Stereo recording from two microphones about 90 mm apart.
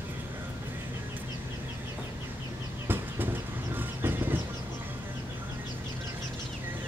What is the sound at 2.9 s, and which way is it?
Music, 20° right (ahead or behind).